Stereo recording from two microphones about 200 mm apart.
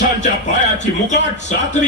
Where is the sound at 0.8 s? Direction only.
35° left (ahead or behind).